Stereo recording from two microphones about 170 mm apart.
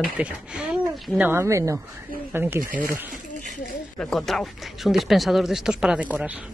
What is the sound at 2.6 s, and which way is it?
Speech, 55° right (ahead or behind).